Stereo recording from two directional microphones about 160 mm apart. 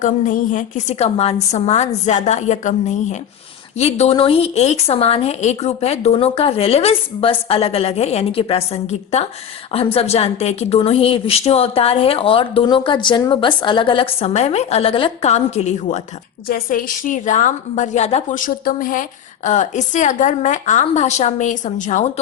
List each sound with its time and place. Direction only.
0.0 s a woman's voice: 50° left (ahead or behind)
16.5 s a woman's voice: 60° left (ahead or behind)